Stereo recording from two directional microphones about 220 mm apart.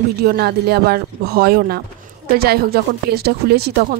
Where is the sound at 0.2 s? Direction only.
45° right (ahead or behind).